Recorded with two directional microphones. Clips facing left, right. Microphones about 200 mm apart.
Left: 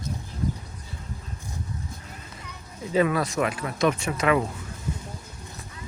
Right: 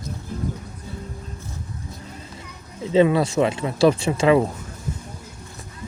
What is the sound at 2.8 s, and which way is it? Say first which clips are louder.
Speech: right 6 dB; 25° right (ahead or behind).